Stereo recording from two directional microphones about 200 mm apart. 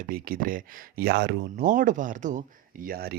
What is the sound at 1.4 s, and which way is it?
Speech, 40° right (ahead or behind).